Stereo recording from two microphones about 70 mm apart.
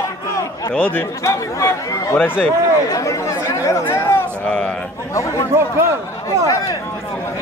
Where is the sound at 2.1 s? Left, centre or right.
Left.